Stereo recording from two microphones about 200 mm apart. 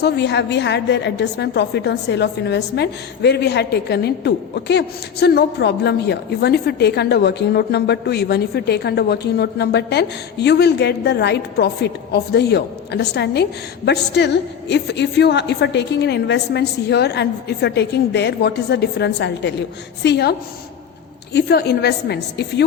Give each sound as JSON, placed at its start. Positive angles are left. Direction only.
{"t": 0.0, "sound": "a woman's voice", "side_deg": 55}
{"t": 21.3, "sound": "a woman's voice", "side_deg": 55}